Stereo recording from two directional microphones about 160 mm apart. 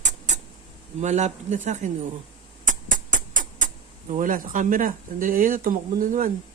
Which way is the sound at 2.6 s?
55° right (ahead or behind).